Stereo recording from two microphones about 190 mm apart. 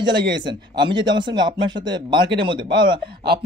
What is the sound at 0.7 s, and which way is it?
Speech, 25° right (ahead or behind).